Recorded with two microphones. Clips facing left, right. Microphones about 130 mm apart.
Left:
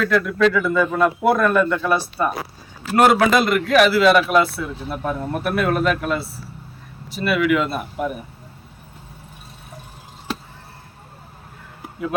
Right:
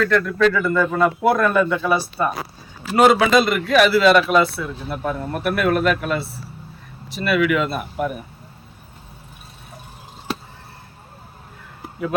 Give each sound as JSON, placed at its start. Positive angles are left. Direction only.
{"t": 0.0, "sound": "speech", "side_deg": 5}
{"t": 4.5, "sound": "speech", "side_deg": 15}
{"t": 5.0, "sound": "speech", "side_deg": 0}
{"t": 7.2, "sound": "speech", "side_deg": 0}